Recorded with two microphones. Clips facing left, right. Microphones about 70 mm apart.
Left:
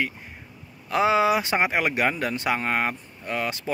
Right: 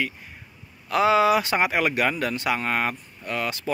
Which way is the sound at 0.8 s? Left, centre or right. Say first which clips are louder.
Right 1 dB; left.